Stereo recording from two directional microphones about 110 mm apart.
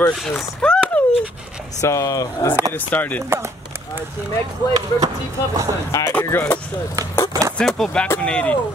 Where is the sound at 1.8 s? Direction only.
30° left (ahead or behind).